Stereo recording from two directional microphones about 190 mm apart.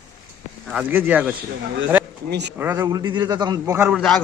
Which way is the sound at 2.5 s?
15° right (ahead or behind).